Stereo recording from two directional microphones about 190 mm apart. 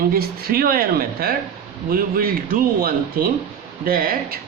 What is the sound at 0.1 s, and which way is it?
A man's voice, 50° right (ahead or behind).